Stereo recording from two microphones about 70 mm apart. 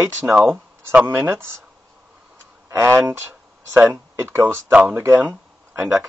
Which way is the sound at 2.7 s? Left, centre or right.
Right.